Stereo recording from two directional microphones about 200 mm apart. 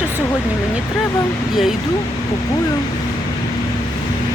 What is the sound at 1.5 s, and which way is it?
Speech, centre (ahead or behind).